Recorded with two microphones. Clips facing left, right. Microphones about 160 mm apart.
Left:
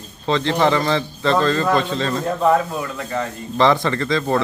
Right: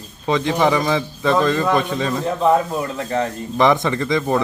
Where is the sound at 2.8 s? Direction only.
40° right (ahead or behind).